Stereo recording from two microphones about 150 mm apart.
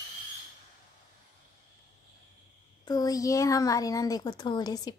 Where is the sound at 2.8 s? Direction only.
25° left (ahead or behind).